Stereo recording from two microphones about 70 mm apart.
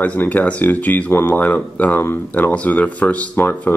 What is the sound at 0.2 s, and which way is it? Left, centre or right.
Speech, left.